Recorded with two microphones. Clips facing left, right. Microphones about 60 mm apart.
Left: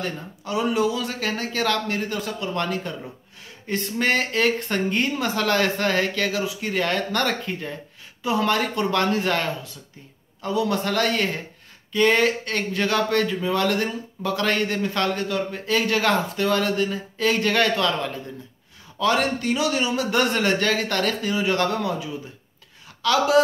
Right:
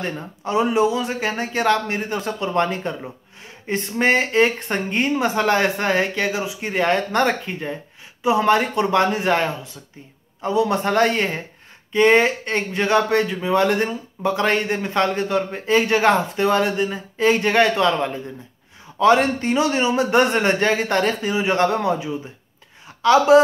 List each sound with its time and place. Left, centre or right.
0.0 s speech: right